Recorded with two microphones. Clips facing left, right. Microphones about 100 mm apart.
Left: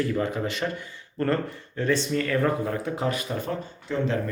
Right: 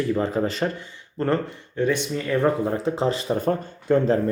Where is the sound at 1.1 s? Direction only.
20° right (ahead or behind).